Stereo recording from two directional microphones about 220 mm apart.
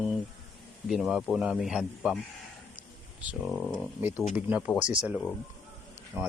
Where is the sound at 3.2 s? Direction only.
Centre (ahead or behind).